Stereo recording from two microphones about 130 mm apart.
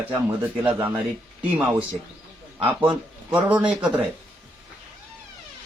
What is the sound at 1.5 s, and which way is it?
Speech, 10° right (ahead or behind).